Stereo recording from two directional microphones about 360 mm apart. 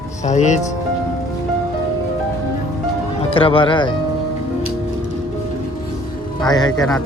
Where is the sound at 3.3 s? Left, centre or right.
Centre.